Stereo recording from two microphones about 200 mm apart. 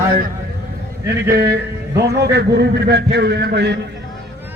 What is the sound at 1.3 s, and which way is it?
Speech, 50° right (ahead or behind).